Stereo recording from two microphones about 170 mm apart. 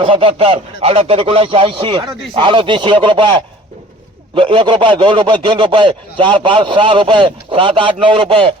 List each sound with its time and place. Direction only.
0.0 s speech: 30° right (ahead or behind)